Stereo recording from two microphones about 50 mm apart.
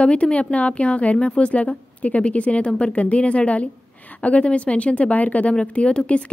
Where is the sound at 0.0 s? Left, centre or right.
Left.